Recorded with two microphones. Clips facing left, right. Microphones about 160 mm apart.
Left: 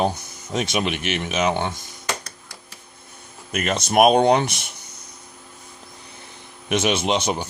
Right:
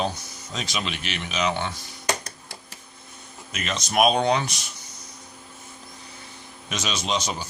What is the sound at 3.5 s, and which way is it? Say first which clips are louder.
Speech: left 6 dB; 55° left (ahead or behind).